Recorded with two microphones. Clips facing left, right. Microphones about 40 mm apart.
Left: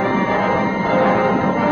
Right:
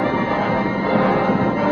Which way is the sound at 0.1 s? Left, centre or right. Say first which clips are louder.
Left 2 dB; left.